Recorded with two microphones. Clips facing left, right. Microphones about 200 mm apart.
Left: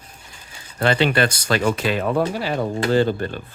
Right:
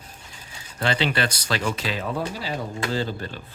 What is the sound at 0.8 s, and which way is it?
Speech, 55° left (ahead or behind).